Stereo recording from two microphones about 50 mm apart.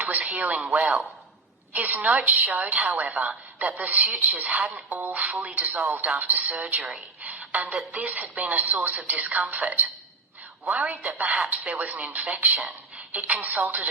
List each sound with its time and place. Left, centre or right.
0.0 s a woman's voice: right